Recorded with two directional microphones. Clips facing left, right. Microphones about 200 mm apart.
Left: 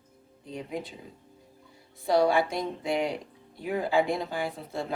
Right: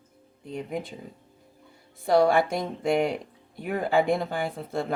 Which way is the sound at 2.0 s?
50° right (ahead or behind).